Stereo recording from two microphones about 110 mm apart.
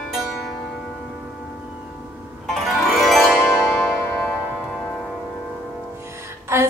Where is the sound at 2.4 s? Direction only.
Centre (ahead or behind).